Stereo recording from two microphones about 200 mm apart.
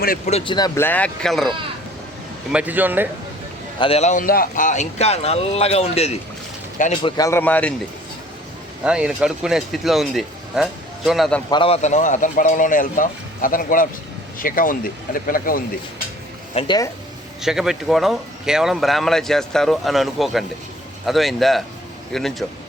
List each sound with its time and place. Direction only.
0.3 s speech: 30° left (ahead or behind)
0.8 s speech: 10° left (ahead or behind); by 3.1 s 10° right (ahead or behind)
3.8 s a man's voice: 30° left (ahead or behind)
7.0 s a man's voice: 15° left (ahead or behind)
8.8 s speech: 5° right (ahead or behind)
11.5 s a man's voice: 30° left (ahead or behind); by 15.6 s 45° left (ahead or behind)
16.6 s speech: 20° left (ahead or behind)
17.4 s speech: centre (ahead or behind)